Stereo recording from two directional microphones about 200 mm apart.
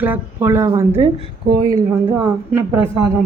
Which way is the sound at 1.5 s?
60° right (ahead or behind).